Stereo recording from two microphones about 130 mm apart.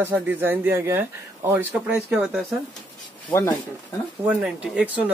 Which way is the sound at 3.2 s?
15° left (ahead or behind).